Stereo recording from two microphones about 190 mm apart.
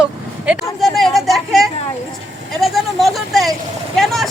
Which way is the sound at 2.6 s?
Centre (ahead or behind).